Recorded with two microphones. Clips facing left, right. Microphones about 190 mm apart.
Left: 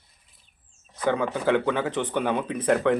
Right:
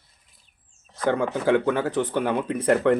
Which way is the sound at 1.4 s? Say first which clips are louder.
Right 2 dB; 10° right (ahead or behind).